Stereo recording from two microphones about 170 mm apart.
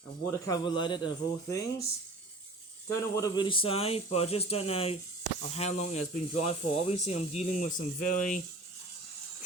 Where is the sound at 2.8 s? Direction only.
20° left (ahead or behind); by 8.4 s 50° left (ahead or behind).